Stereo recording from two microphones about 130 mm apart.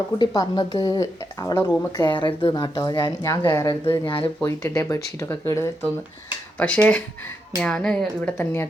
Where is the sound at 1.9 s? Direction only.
35° left (ahead or behind).